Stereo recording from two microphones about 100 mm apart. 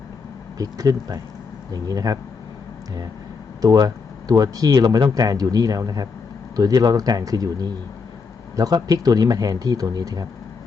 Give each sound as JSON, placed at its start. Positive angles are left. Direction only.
{"t": 0.6, "sound": "speech", "side_deg": -35}
{"t": 3.6, "sound": "speech", "side_deg": -40}